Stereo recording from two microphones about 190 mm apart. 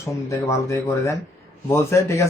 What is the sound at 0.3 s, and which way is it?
Speech, 15° left (ahead or behind).